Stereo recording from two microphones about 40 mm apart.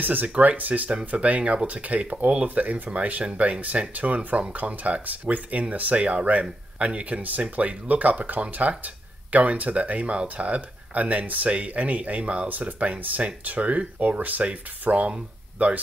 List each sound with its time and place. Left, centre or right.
0.0 s speech: right
0.3 s speech: right
0.8 s speech: right
12.4 s speech: right